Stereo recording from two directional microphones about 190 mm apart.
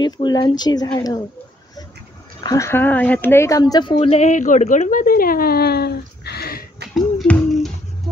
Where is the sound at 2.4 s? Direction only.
20° left (ahead or behind); by 6.5 s 55° left (ahead or behind).